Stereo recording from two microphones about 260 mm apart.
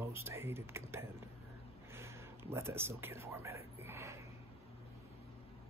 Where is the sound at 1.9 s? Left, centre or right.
Centre.